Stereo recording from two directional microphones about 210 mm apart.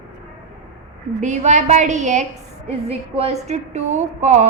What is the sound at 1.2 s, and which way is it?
A woman's voice, 35° right (ahead or behind).